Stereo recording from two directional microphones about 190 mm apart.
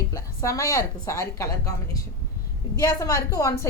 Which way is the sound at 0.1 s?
15° left (ahead or behind).